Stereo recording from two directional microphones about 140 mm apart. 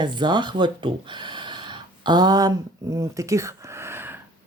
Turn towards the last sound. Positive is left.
turn(degrees=-15)  # may be behind; listen again after turning